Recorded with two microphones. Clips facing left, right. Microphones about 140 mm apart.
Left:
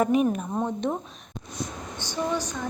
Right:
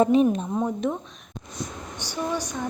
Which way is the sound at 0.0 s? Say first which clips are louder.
Right 3 dB; 30° right (ahead or behind).